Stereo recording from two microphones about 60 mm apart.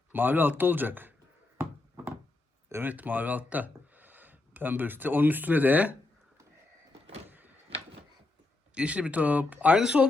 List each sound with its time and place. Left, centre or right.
0.1 s speech: right
2.8 s speech: right
7.3 s a sound: right
8.7 s speech: centre
9.8 s speech: centre